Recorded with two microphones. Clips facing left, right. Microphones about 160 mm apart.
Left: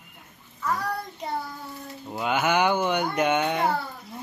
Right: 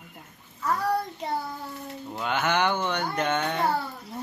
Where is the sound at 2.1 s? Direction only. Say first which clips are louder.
Left 3 dB; 10° left (ahead or behind).